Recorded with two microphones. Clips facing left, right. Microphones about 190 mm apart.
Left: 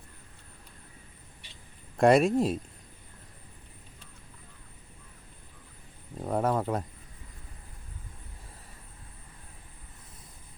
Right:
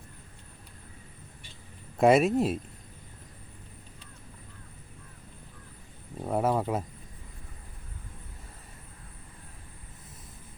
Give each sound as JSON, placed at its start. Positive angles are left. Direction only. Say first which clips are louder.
{"t": 2.0, "sound": "speech", "louder": "even", "side_deg": -5}
{"t": 6.1, "sound": "speech", "louder": "right 1 dB", "side_deg": -5}